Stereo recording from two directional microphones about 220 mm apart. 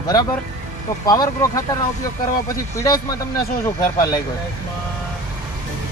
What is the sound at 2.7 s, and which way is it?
Speech, 15° left (ahead or behind).